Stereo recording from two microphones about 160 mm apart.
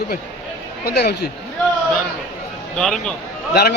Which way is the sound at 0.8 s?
90° left.